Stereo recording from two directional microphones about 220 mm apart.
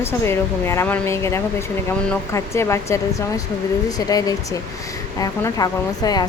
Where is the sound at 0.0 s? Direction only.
10° left (ahead or behind).